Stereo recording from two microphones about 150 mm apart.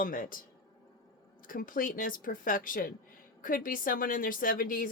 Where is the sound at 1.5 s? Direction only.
65° left (ahead or behind).